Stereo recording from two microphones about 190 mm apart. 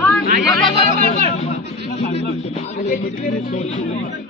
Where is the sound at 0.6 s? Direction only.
35° left (ahead or behind).